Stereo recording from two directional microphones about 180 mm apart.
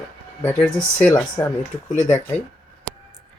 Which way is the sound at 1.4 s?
20° left (ahead or behind).